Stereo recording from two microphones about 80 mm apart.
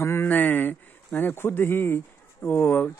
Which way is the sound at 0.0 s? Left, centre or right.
Left.